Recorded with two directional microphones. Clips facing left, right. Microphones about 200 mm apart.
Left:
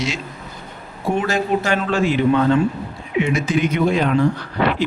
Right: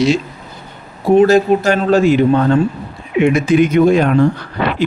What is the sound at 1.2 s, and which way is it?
A man's voice, 40° right (ahead or behind).